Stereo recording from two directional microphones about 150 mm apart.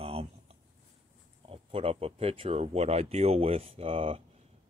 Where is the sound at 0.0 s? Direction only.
40° right (ahead or behind).